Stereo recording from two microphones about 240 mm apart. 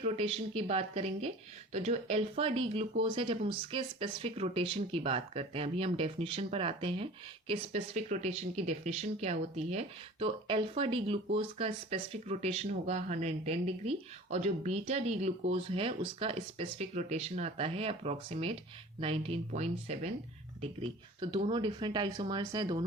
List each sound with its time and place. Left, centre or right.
0.0 s speech: right